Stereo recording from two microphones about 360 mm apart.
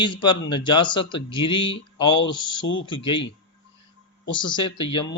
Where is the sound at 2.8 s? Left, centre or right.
Centre.